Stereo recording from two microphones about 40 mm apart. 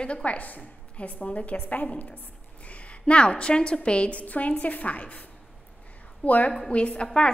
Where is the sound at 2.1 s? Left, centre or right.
Left.